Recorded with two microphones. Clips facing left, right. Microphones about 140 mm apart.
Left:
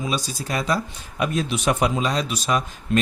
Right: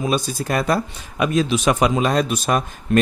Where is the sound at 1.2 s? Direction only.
90° right.